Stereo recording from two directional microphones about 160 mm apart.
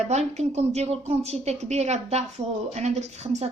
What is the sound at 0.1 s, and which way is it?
A woman's voice, 45° right (ahead or behind).